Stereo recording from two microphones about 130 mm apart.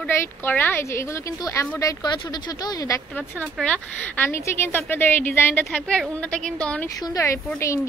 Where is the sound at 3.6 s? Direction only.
10° left (ahead or behind).